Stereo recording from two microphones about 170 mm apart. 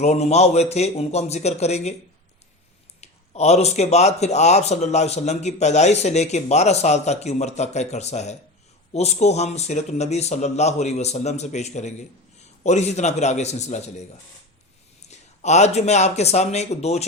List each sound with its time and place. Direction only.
0.0 s speech: 40° left (ahead or behind)
3.0 s speech: 40° left (ahead or behind)